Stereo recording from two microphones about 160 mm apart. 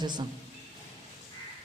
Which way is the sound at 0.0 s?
25° right (ahead or behind).